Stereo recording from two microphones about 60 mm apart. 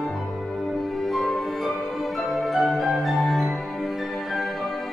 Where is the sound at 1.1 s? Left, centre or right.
Centre.